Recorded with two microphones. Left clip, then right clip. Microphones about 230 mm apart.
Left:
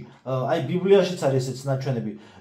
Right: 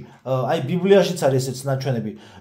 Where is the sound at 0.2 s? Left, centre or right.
Right.